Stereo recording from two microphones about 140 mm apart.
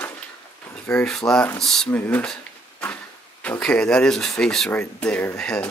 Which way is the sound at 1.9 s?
10° left (ahead or behind).